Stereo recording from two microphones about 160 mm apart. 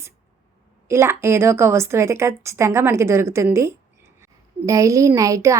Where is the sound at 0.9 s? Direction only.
15° right (ahead or behind).